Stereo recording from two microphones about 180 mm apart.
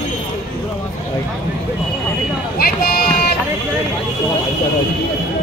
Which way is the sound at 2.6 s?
55° left (ahead or behind).